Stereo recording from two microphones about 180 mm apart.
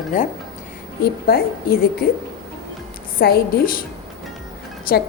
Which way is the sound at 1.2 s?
60° left (ahead or behind).